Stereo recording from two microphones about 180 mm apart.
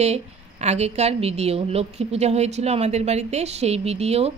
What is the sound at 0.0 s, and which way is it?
A woman's voice, 35° right (ahead or behind).